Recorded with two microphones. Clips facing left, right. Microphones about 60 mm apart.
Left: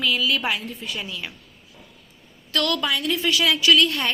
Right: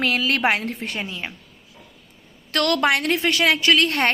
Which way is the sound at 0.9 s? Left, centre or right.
Right.